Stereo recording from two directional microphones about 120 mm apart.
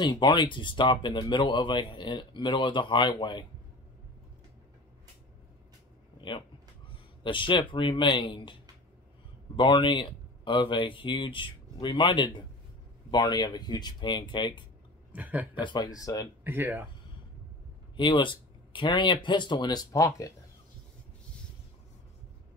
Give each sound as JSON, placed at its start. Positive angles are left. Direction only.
{"t": 0.0, "sound": "speech", "side_deg": 40}
{"t": 7.2, "sound": "speech", "side_deg": 45}
{"t": 9.6, "sound": "speech", "side_deg": 45}
{"t": 15.1, "sound": "a man's voice", "side_deg": -15}
{"t": 15.6, "sound": "speech", "side_deg": 35}
{"t": 16.4, "sound": "a man's voice", "side_deg": -15}
{"t": 17.9, "sound": "speech", "side_deg": 40}